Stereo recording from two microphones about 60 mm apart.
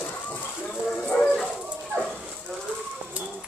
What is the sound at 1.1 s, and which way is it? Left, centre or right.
Dog, left.